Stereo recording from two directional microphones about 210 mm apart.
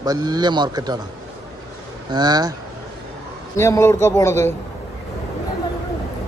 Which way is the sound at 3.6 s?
15° left (ahead or behind).